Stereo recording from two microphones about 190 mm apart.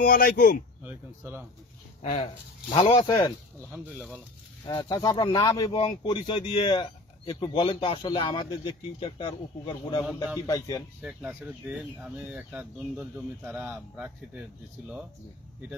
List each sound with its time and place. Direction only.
0.0 s speech: 50° left (ahead or behind)
0.8 s speech: 10° right (ahead or behind)
2.0 s speech: 30° left (ahead or behind)
3.7 s speech: 5° right (ahead or behind)
4.6 s speech: 20° left (ahead or behind)
11.0 s speech: 5° right (ahead or behind)